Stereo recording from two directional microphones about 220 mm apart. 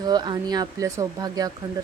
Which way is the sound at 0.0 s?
20° right (ahead or behind).